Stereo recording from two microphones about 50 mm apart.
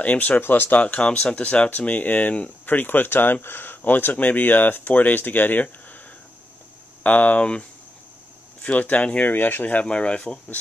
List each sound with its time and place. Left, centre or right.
0.0 s speech: left
0.4 s speech: left
0.7 s speech: left
7.0 s speech: left
8.6 s speech: left
9.2 s speech: left
9.7 s speech: left